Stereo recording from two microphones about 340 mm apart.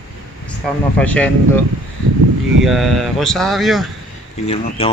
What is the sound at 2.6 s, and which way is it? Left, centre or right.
Speech, centre.